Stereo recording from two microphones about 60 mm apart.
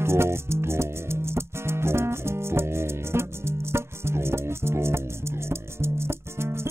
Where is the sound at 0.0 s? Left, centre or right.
Right.